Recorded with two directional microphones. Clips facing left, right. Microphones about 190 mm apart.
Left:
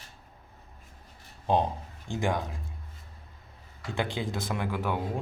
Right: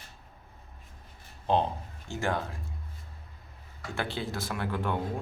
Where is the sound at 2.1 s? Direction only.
15° left (ahead or behind).